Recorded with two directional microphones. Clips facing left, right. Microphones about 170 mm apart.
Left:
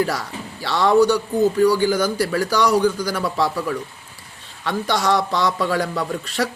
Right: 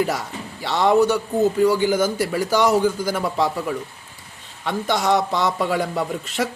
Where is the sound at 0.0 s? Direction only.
20° right (ahead or behind).